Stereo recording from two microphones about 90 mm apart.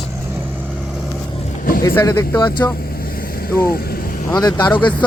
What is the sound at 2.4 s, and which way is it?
Speech, 55° left (ahead or behind).